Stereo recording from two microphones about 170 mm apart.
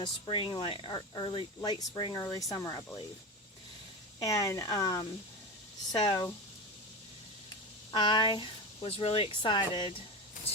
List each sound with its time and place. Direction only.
0.0 s speech: 30° left (ahead or behind)
4.2 s speech: 20° left (ahead or behind)
7.9 s speech: 25° left (ahead or behind)